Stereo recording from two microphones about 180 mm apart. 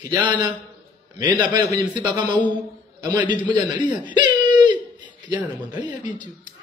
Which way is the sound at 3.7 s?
25° right (ahead or behind).